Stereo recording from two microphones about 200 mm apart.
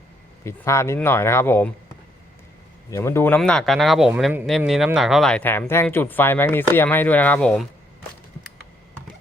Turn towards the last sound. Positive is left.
turn(degrees=5)  # may be behind; listen again after turning